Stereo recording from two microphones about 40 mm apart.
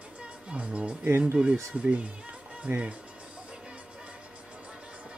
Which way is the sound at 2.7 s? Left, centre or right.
Right.